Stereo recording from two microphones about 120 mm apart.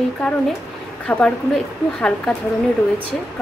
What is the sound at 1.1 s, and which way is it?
Speech, 5° left (ahead or behind).